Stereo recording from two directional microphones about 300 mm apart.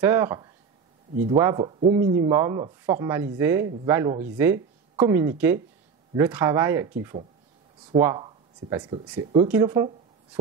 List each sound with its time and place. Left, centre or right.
0.0 s speech: centre